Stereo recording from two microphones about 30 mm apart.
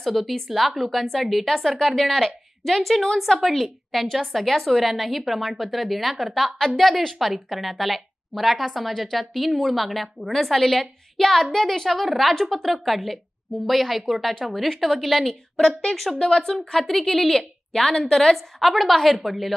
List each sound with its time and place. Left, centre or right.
0.0 s a woman's voice: centre
7.2 s a woman's voice: centre
16.2 s speech: left
16.5 s a woman's voice: centre